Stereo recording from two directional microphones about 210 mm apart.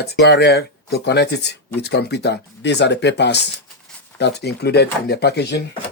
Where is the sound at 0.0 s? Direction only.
55° left (ahead or behind).